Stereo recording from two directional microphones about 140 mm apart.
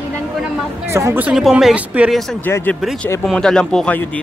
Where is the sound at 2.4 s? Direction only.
15° left (ahead or behind).